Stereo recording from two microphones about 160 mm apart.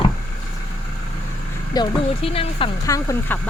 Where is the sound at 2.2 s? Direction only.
35° left (ahead or behind).